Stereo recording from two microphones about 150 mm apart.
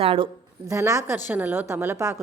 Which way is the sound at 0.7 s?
20° right (ahead or behind).